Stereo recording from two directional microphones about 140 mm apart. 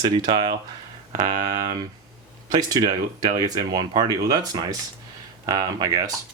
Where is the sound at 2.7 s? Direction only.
30° right (ahead or behind).